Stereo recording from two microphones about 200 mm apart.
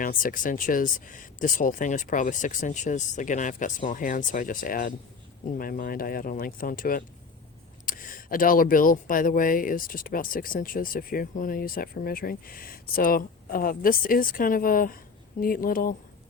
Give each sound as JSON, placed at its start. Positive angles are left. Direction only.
{"t": 0.0, "sound": "speech", "side_deg": 45}